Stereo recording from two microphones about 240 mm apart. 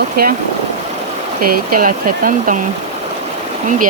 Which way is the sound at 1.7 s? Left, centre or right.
Right.